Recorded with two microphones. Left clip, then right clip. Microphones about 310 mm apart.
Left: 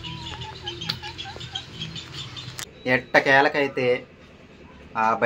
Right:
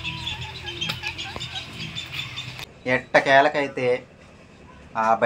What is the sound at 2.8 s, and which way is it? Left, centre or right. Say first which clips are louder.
Speech: even; centre.